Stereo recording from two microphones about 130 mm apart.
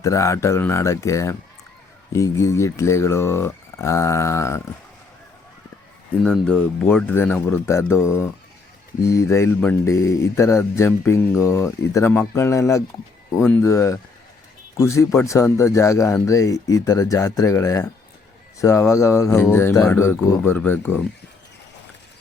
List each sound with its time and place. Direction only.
0.0 s speech: 25° left (ahead or behind)
6.2 s speech: 10° left (ahead or behind)